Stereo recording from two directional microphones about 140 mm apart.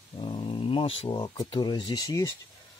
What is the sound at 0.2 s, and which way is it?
Speech, 40° left (ahead or behind).